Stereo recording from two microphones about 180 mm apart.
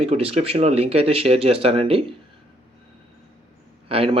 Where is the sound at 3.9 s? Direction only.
30° right (ahead or behind).